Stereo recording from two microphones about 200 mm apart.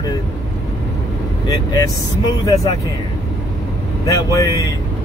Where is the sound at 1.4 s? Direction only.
15° left (ahead or behind).